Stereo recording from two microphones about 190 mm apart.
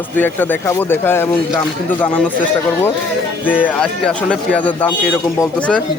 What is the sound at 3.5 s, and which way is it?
Speech, 10° left (ahead or behind).